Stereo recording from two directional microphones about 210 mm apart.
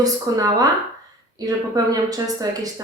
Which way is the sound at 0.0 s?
15° right (ahead or behind).